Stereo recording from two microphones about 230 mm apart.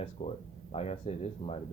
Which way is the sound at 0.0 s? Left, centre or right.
Left.